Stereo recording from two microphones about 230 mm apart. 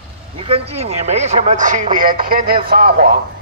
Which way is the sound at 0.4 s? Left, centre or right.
Right.